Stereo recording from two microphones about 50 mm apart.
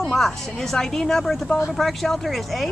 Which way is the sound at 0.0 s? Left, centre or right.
Centre.